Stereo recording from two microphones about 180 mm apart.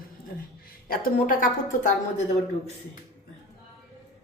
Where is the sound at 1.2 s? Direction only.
50° left (ahead or behind).